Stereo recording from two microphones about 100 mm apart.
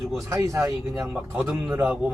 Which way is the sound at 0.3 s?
30° right (ahead or behind).